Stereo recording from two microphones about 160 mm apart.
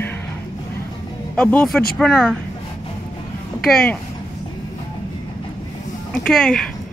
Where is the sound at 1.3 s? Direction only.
10° left (ahead or behind).